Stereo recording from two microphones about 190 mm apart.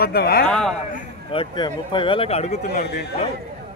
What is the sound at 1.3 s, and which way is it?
Speech, 25° left (ahead or behind).